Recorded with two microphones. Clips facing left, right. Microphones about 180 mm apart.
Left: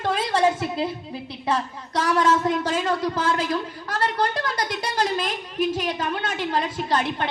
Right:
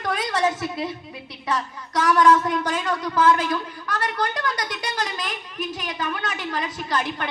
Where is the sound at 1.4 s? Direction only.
30° left (ahead or behind).